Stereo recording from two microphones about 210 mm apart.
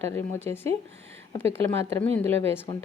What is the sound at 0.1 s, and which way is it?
Speech, 10° left (ahead or behind).